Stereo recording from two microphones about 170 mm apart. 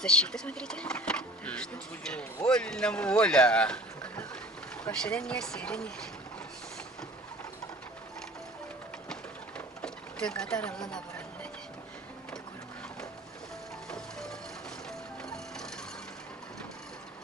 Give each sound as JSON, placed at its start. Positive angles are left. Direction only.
{"t": 0.0, "sound": "a sound", "side_deg": 5}
{"t": 2.5, "sound": "boat", "side_deg": 5}
{"t": 4.8, "sound": "speech", "side_deg": 5}
{"t": 9.6, "sound": "a sound", "side_deg": 5}
{"t": 13.9, "sound": "music", "side_deg": 5}
{"t": 15.2, "sound": "wood", "side_deg": 5}